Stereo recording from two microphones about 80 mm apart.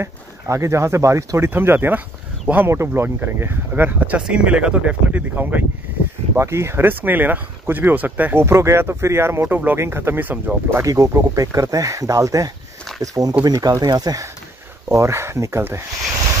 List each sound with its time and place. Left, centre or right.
0.0 s speech: right
1.5 s speech: right
4.2 s speech: centre
6.3 s speech: right
10.8 s speech: right
14.9 s speech: right